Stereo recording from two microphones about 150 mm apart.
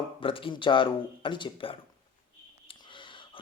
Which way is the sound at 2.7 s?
35° left (ahead or behind).